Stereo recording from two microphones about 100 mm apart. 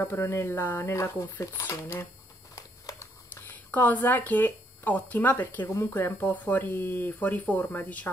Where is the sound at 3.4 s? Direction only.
15° left (ahead or behind).